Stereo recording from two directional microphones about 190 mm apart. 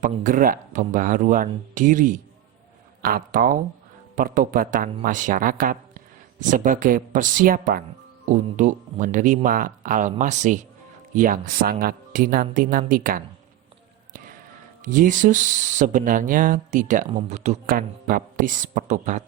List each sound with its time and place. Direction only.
0.0 s speech: 45° right (ahead or behind)
14.8 s speech: 45° right (ahead or behind)
17.1 s speech: 30° right (ahead or behind)